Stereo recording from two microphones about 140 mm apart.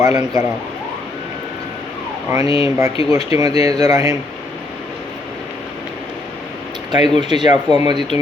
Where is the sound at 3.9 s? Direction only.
25° right (ahead or behind).